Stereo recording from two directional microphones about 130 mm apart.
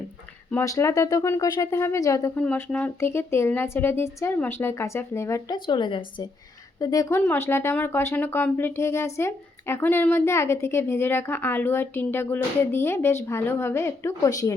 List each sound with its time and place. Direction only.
0.6 s speech: 25° left (ahead or behind)
2.4 s speech: 10° left (ahead or behind)
5.6 s speech: 35° left (ahead or behind)
6.7 s speech: 30° left (ahead or behind)
7.2 s speech: 15° left (ahead or behind)